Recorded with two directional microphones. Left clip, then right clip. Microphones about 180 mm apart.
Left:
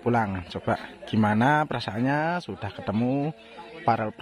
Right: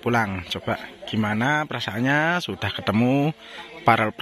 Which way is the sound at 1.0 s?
20° left (ahead or behind).